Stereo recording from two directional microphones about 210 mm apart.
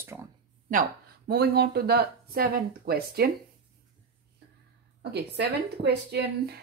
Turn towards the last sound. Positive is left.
turn(degrees=-50)  # may be behind; listen again after turning